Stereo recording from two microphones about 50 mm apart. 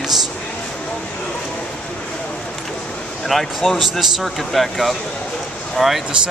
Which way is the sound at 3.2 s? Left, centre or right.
Centre.